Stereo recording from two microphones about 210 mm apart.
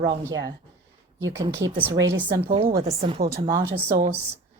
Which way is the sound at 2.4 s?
25° right (ahead or behind).